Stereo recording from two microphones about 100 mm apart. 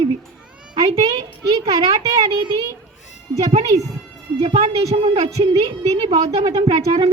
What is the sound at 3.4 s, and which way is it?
A woman's voice, 90° right.